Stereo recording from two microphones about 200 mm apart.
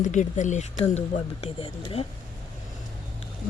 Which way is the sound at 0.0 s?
35° left (ahead or behind).